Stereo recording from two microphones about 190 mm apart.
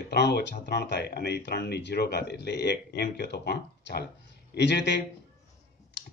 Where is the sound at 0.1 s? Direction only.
60° left (ahead or behind).